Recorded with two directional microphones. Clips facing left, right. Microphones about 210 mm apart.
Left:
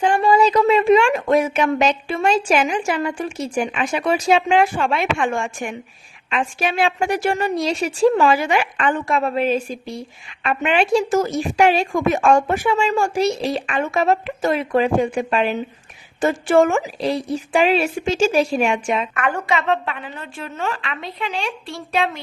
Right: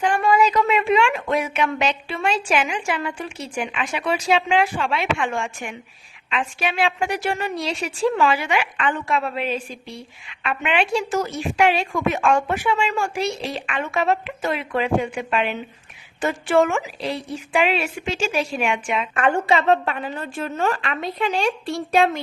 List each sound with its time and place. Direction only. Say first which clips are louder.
0.0 s a woman's voice: left 3 dB; 30° left (ahead or behind)
19.1 s a woman's voice: right 2 dB; 30° right (ahead or behind); by 22.2 s 45° right (ahead or behind)